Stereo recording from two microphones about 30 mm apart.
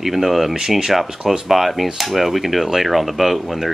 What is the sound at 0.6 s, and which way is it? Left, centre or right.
Speech, centre.